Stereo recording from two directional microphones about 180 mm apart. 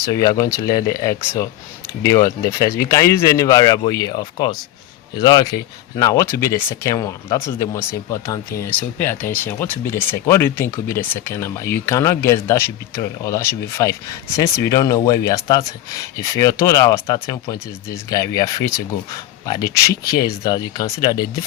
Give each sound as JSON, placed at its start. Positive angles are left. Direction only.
{"t": 0.0, "sound": "speech", "side_deg": 20}